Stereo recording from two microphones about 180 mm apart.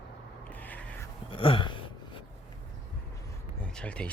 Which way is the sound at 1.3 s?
30° left (ahead or behind).